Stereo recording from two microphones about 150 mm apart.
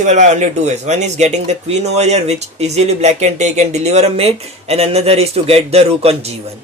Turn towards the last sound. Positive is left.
turn(degrees=-45)  # may be behind; listen again after turning